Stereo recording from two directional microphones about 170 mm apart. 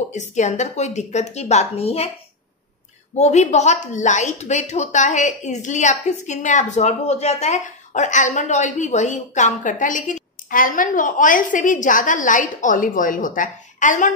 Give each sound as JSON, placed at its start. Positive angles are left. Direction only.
{"t": 0.1, "sound": "a woman's voice", "side_deg": 45}
{"t": 3.2, "sound": "a woman's voice", "side_deg": 40}